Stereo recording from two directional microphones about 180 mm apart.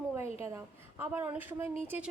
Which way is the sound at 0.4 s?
15° right (ahead or behind).